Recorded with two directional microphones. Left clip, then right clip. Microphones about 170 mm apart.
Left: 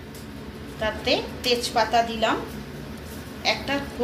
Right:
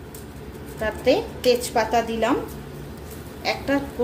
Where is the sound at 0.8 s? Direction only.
65° right (ahead or behind).